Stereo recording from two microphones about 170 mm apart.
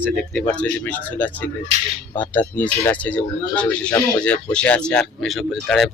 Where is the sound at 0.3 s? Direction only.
10° left (ahead or behind).